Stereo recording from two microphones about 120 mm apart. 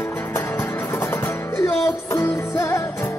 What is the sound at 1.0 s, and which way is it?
Music, 20° left (ahead or behind).